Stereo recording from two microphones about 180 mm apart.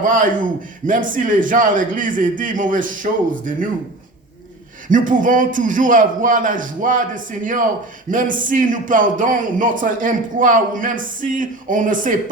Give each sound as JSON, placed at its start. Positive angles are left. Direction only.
{"t": 0.0, "sound": "a man's voice", "side_deg": -50}
{"t": 4.9, "sound": "a man's voice", "side_deg": -50}